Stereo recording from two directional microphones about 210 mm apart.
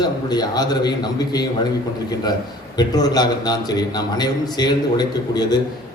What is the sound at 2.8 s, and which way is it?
A man's voice, 20° left (ahead or behind).